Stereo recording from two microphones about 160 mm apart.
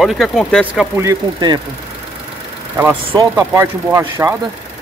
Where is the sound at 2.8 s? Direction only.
15° right (ahead or behind).